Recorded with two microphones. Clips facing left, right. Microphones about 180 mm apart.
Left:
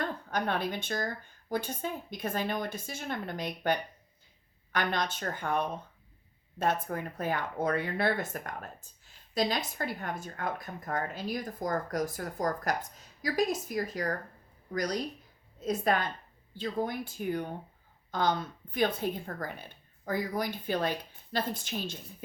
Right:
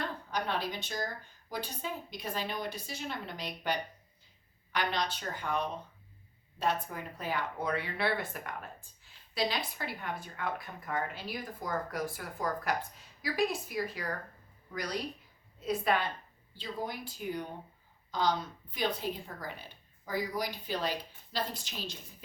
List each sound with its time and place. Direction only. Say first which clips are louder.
0.0 s a woman's voice: left 3 dB; 50° left (ahead or behind)